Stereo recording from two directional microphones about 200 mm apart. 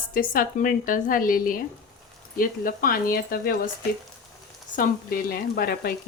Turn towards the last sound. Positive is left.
turn(degrees=50)  # may be behind; listen again after turning